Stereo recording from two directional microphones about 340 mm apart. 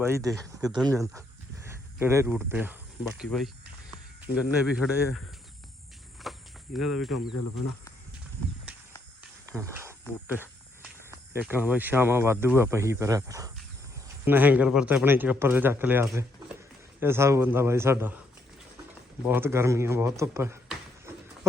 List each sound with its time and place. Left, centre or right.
0.0 s speech: centre
4.6 s speech: centre
6.3 s cricket: centre
6.7 s speech: centre
7.3 s speech: left
9.5 s speech: centre
19.3 s speech: centre